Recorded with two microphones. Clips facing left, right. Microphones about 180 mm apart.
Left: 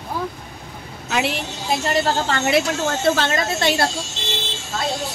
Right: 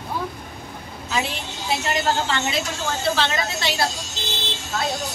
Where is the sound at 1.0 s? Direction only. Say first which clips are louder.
Left 4 dB; 70° left (ahead or behind).